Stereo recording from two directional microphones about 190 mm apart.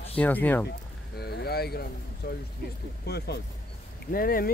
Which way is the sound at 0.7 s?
60° left (ahead or behind).